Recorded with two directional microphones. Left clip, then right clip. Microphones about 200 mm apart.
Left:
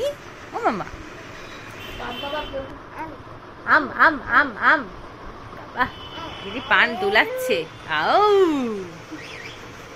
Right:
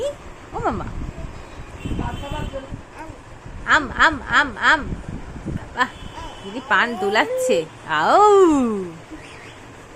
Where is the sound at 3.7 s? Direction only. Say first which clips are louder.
Even; 10° right (ahead or behind).